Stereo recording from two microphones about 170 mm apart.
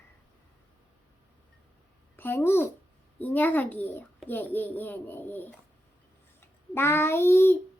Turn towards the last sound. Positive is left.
turn(degrees=15)  # may be behind; listen again after turning